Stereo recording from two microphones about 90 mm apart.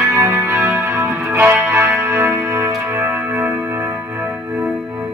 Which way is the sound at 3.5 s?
20° right (ahead or behind).